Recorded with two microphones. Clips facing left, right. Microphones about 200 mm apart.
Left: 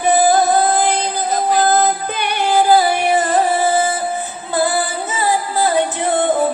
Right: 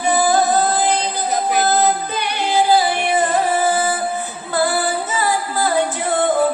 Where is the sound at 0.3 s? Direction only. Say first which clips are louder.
Left 2 dB; 55° left (ahead or behind).